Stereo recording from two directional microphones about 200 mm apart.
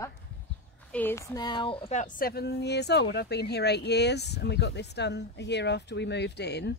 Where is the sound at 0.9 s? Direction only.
10° left (ahead or behind).